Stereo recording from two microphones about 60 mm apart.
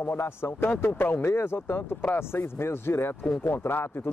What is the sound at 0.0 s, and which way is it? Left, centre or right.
Speech, left.